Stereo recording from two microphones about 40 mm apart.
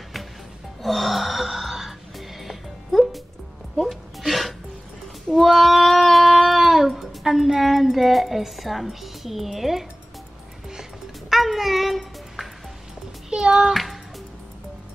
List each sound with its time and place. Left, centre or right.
0.8 s music: centre
3.8 s a sound: centre
9.0 s speech: centre
10.7 s music: centre
13.3 s music: centre